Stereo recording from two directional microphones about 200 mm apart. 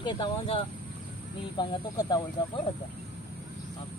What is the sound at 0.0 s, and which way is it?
Speech, 25° left (ahead or behind).